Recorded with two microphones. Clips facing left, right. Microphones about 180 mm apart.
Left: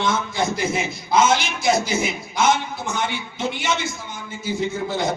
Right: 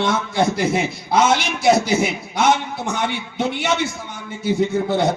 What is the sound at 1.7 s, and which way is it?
A man's voice, 65° right (ahead or behind).